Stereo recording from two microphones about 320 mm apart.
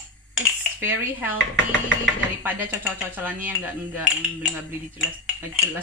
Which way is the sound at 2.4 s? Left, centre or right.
Centre.